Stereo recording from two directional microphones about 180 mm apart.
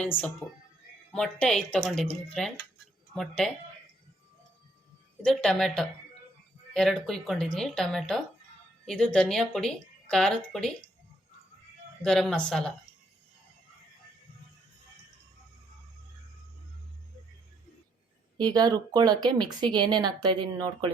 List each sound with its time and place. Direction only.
0.0 s speech: 10° left (ahead or behind)
5.2 s speech: 5° left (ahead or behind)
12.0 s speech: centre (ahead or behind)
18.3 s a woman's voice: 20° right (ahead or behind)